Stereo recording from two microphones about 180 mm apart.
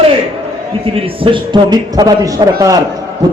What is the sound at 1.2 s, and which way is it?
A man's voice, 25° right (ahead or behind).